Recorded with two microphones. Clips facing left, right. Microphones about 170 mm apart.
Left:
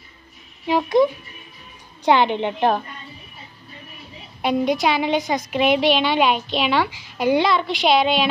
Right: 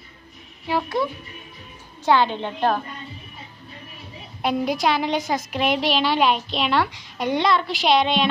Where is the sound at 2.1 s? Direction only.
15° left (ahead or behind).